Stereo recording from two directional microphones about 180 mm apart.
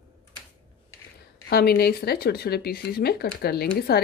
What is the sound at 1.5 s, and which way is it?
Speech, 60° left (ahead or behind).